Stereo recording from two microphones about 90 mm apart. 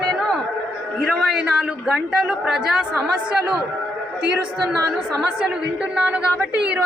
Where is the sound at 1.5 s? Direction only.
10° right (ahead or behind).